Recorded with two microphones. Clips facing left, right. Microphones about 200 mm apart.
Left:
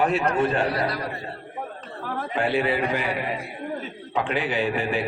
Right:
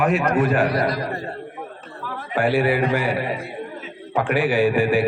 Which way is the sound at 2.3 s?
20° left (ahead or behind).